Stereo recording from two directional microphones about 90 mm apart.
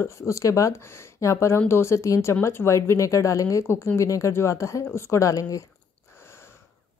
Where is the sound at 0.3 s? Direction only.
40° left (ahead or behind).